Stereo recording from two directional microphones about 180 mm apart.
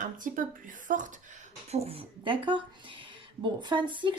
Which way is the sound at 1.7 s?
35° right (ahead or behind).